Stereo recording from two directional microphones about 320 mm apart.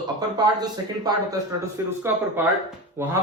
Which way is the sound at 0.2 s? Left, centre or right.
Centre.